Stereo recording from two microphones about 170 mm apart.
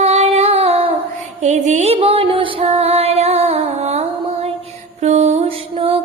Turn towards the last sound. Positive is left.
turn(degrees=-35)  # may be behind; listen again after turning